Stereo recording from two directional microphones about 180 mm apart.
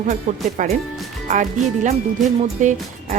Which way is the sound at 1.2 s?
40° right (ahead or behind).